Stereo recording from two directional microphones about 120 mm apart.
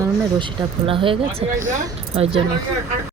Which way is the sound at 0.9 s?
45° right (ahead or behind).